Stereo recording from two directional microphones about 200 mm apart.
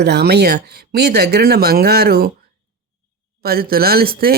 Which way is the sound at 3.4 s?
50° right (ahead or behind).